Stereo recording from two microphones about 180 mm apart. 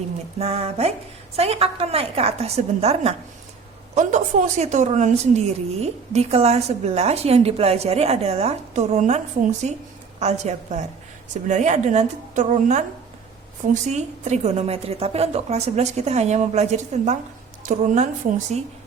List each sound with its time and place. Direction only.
0.3 s a woman's voice: 35° right (ahead or behind)
13.8 s a woman's voice: 40° right (ahead or behind)